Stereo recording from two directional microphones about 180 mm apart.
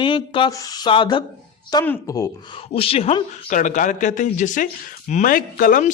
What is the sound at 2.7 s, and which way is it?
A man's voice, 30° left (ahead or behind).